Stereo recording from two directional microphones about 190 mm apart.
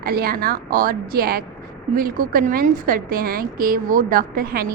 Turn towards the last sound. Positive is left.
turn(degrees=-50)  # may be behind; listen again after turning